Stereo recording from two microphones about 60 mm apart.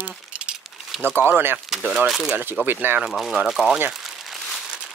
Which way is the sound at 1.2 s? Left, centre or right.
Right.